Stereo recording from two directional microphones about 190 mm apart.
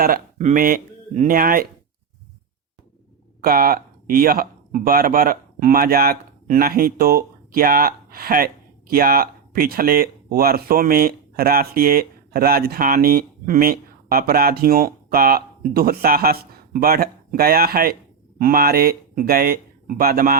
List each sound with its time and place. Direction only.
0.0 s speech: 45° right (ahead or behind)
3.4 s speech: 50° right (ahead or behind)